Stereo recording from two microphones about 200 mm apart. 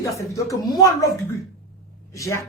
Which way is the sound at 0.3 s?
15° left (ahead or behind).